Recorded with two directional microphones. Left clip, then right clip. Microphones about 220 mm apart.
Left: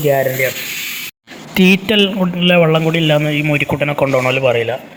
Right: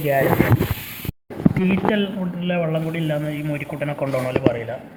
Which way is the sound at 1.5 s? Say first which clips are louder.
Left 12 dB; 40° left (ahead or behind).